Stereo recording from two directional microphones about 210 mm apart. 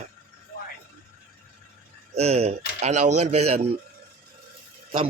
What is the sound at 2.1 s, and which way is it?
Speech, 30° right (ahead or behind).